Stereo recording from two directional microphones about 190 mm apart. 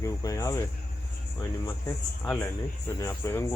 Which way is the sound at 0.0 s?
15° left (ahead or behind).